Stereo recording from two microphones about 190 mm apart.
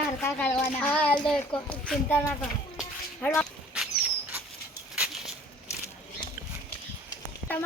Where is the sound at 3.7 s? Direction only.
5° right (ahead or behind).